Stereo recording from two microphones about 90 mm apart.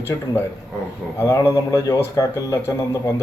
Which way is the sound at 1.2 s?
35° left (ahead or behind).